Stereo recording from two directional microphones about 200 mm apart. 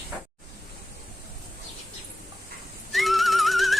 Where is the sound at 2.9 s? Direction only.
Centre (ahead or behind).